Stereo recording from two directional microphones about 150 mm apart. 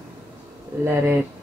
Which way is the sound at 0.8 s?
15° right (ahead or behind).